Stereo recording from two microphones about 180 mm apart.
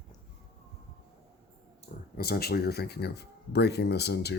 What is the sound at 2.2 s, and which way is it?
Speech, 60° left (ahead or behind).